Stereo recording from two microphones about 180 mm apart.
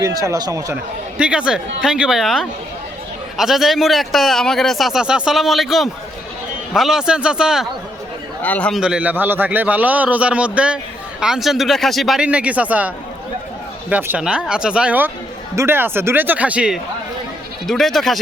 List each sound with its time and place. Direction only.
0.0 s speech: 20° right (ahead or behind)
1.2 s speech: 5° right (ahead or behind)
8.4 s a man's voice: 10° left (ahead or behind)
8.8 s a man's voice: 5° right (ahead or behind)
13.9 s a man's voice: 5° right (ahead or behind)